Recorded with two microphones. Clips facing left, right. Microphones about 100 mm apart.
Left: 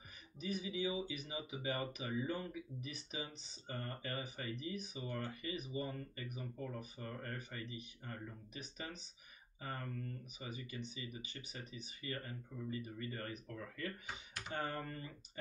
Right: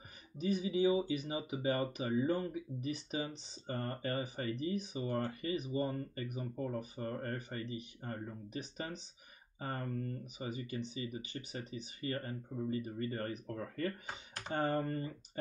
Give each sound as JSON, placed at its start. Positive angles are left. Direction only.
{"t": 0.4, "sound": "speech", "side_deg": -40}